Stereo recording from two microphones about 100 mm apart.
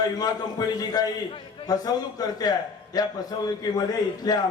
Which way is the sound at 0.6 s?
40° left (ahead or behind).